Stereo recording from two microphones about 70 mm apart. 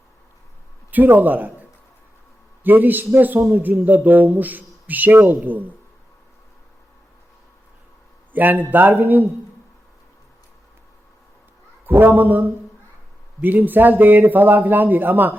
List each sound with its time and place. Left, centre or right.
0.9 s speech: right
2.6 s speech: right
8.3 s speech: right
11.9 s a man's voice: right